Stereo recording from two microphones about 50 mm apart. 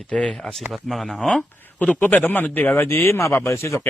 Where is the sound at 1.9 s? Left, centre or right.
Left.